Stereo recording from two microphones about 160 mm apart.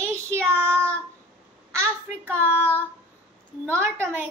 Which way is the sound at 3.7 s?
15° right (ahead or behind).